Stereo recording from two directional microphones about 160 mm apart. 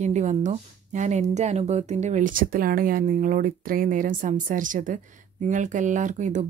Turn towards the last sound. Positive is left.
turn(degrees=-50)  # may be behind; listen again after turning